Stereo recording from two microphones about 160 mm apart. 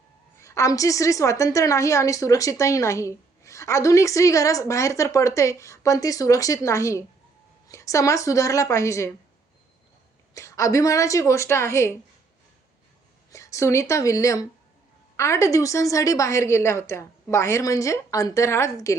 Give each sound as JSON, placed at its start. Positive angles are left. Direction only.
{"t": 0.3, "sound": "a woman's voice", "side_deg": 20}
{"t": 10.3, "sound": "a woman's voice", "side_deg": 20}
{"t": 13.3, "sound": "a woman's voice", "side_deg": 20}